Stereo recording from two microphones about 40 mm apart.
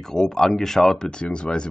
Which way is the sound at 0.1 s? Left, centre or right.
Centre.